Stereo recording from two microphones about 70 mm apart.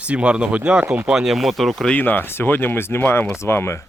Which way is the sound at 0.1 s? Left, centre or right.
Centre.